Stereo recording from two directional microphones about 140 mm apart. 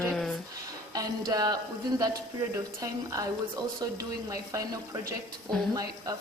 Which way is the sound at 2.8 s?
25° right (ahead or behind).